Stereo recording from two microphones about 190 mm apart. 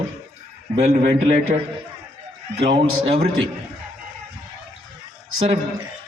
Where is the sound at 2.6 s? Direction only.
30° right (ahead or behind).